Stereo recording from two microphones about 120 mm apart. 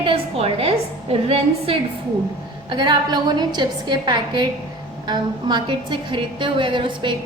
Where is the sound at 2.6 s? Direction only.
40° right (ahead or behind).